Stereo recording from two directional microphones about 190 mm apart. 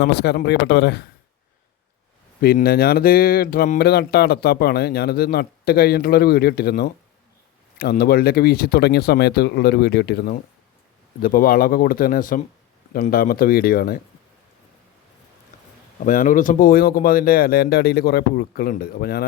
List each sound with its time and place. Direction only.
0.0 s speech: 60° left (ahead or behind)
2.4 s speech: 55° left (ahead or behind)
16.0 s speech: 45° left (ahead or behind)